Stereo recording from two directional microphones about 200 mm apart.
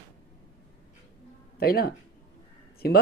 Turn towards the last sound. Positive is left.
turn(degrees=50)  # may be behind; listen again after turning